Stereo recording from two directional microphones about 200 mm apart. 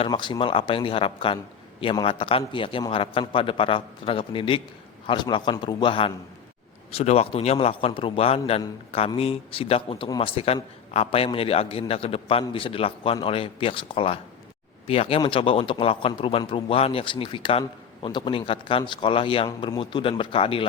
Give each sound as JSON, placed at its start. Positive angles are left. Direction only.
{"t": 0.0, "sound": "a man's voice", "side_deg": 25}